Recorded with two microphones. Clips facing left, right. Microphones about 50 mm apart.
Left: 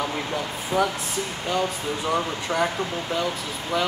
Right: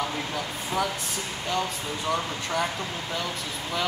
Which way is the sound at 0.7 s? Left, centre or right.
Centre.